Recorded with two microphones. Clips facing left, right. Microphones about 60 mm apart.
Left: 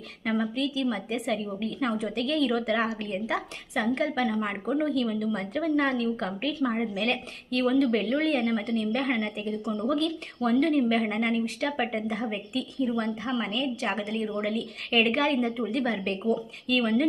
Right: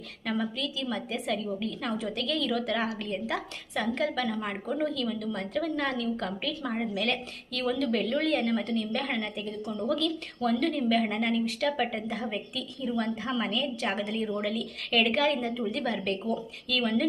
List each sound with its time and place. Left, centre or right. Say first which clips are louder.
0.3 s a woman's voice: left 4 dB; left
12.8 s a woman's voice: left 1 dB; centre
14.5 s a woman's voice: left 2 dB; left